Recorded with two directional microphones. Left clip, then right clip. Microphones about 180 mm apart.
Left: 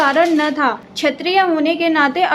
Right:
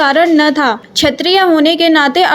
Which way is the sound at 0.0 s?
30° right (ahead or behind).